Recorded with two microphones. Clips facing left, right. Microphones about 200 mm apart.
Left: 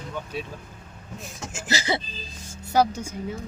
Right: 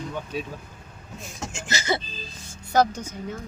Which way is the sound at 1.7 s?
35° left (ahead or behind).